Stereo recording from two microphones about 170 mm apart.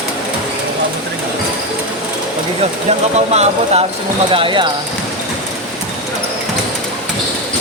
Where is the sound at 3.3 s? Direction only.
40° right (ahead or behind).